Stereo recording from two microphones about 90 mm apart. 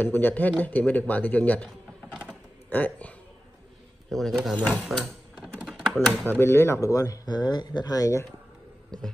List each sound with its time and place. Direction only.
0.0 s speech: 20° left (ahead or behind)
2.7 s speech: 20° left (ahead or behind)
4.1 s speech: centre (ahead or behind)
4.8 s typing: 5° right (ahead or behind)
6.2 s speech: 25° left (ahead or behind)
6.9 s speech: 40° left (ahead or behind)